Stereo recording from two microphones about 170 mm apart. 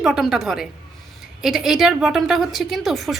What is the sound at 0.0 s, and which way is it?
A woman's voice, 5° right (ahead or behind).